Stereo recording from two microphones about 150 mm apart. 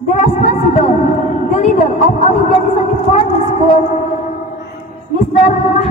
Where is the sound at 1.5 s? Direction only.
50° left (ahead or behind).